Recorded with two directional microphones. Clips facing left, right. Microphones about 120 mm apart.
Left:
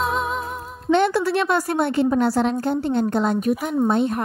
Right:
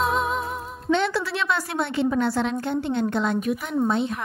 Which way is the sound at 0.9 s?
50° left (ahead or behind).